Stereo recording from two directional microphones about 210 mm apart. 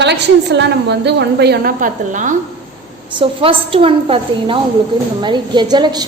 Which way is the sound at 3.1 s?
25° right (ahead or behind).